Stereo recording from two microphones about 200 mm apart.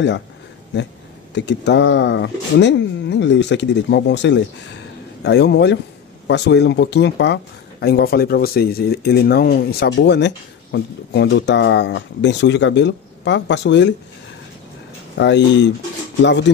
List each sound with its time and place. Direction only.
0.7 s speech: 60° left (ahead or behind)
15.1 s speech: 60° left (ahead or behind)